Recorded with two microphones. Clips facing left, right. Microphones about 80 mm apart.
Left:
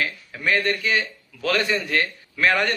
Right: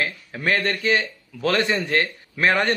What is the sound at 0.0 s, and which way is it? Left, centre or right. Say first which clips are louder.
A man's voice: right 1 dB; right.